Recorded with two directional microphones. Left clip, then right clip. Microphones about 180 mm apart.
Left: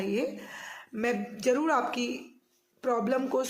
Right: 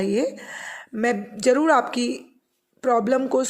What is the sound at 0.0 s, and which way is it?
A woman's voice, 50° right (ahead or behind).